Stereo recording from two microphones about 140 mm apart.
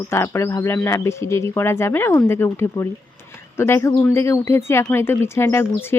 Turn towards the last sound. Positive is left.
turn(degrees=20)  # may be behind; listen again after turning